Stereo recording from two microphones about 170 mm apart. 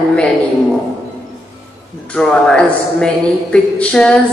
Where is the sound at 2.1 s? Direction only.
5° left (ahead or behind).